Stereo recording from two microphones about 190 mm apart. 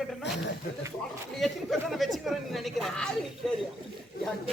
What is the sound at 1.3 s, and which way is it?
A woman's voice, centre (ahead or behind).